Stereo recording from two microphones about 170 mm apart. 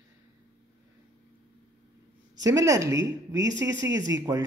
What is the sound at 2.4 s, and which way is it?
Speech, 20° right (ahead or behind).